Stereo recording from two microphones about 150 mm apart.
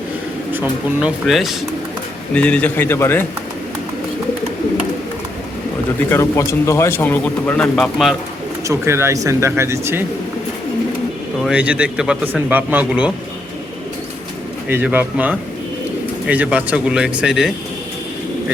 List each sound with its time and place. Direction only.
0.5 s a man's voice: 10° right (ahead or behind)
1.3 s speech: centre (ahead or behind); by 3.2 s 15° left (ahead or behind)
6.1 s speech: 20° left (ahead or behind); by 8.1 s centre (ahead or behind)
8.6 s a man's voice: 20° right (ahead or behind)
11.4 s a man's voice: 10° right (ahead or behind)
14.7 s a man's voice: 10° right (ahead or behind)